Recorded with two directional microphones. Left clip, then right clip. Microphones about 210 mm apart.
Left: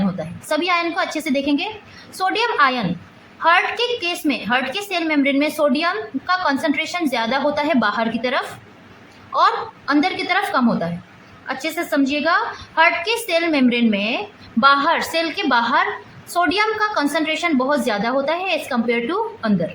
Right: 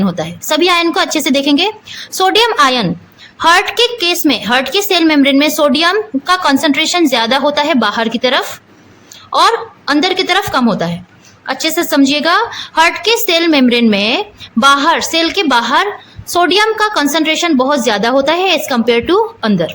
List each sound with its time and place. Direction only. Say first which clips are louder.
0.2 s a woman's voice: right 11 dB; 45° right (ahead or behind)